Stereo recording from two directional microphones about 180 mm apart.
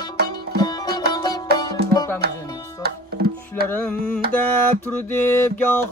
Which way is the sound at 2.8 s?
60° right (ahead or behind).